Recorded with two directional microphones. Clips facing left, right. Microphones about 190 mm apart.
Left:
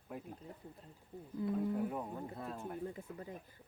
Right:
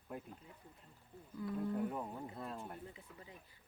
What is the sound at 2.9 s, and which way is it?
Speech, 50° left (ahead or behind).